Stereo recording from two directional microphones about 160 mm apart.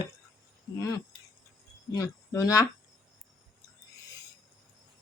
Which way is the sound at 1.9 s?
20° left (ahead or behind).